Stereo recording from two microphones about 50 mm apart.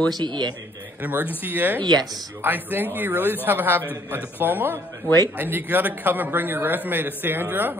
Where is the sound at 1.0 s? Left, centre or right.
Right.